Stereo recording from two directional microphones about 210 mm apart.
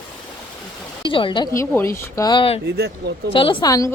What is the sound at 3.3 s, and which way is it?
Speech, 25° left (ahead or behind).